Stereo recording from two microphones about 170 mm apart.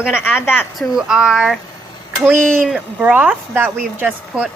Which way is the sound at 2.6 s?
5° right (ahead or behind).